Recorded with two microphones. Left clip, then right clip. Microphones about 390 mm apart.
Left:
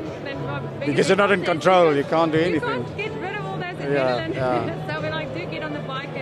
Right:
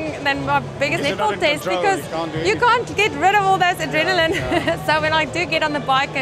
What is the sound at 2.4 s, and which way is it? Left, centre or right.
Speech, right.